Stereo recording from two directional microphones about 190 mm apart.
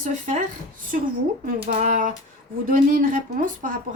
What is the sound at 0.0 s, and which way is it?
Speech, 45° right (ahead or behind).